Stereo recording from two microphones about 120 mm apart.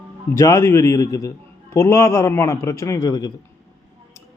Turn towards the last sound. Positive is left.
turn(degrees=30)  # may be behind; listen again after turning